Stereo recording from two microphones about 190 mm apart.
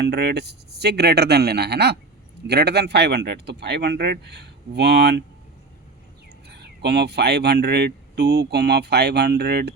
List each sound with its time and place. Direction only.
0.0 s speech: 60° right (ahead or behind)
6.5 s speech: 60° right (ahead or behind)